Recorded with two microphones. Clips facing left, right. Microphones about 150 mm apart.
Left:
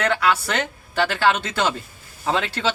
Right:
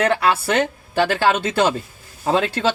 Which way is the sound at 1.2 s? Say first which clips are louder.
Right 1 dB; 45° right (ahead or behind).